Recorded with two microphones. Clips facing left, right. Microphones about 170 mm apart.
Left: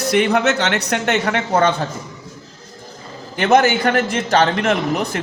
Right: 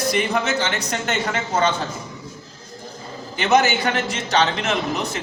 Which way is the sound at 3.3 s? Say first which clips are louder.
Left 4 dB; 55° left (ahead or behind).